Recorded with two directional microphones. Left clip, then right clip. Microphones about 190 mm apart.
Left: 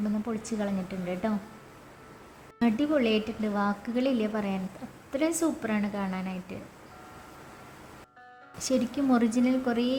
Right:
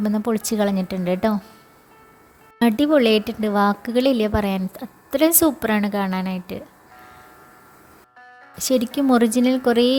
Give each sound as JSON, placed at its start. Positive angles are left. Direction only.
{"t": 0.0, "sound": "speech", "side_deg": -50}
{"t": 2.6, "sound": "a woman's voice", "side_deg": -45}
{"t": 8.5, "sound": "a woman's voice", "side_deg": -45}